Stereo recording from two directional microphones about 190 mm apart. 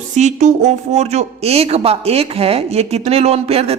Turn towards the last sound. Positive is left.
turn(degrees=-30)  # may be behind; listen again after turning